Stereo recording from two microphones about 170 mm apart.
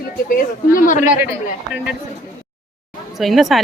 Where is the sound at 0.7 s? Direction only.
55° left (ahead or behind).